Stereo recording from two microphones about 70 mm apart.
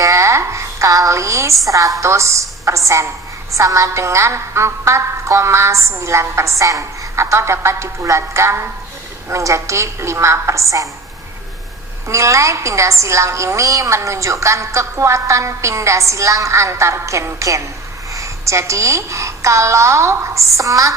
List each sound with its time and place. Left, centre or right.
0.0 s a sound: right
2.0 s a woman's voice: right
12.0 s a woman's voice: right